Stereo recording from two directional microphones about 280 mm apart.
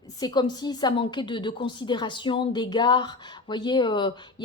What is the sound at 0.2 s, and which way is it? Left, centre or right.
A woman's voice, centre.